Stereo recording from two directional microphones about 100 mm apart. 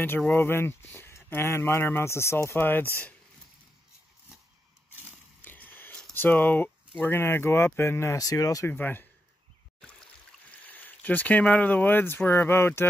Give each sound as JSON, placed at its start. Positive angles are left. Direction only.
{"t": 0.3, "sound": "speech", "side_deg": 25}
{"t": 5.4, "sound": "a sound", "side_deg": 20}
{"t": 6.1, "sound": "speech", "side_deg": 20}
{"t": 8.6, "sound": "speech", "side_deg": 20}
{"t": 10.6, "sound": "speech", "side_deg": 20}